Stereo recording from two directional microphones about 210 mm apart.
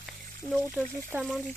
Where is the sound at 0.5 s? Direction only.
Centre (ahead or behind).